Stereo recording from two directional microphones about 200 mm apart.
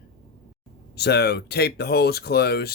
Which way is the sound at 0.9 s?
55° left (ahead or behind).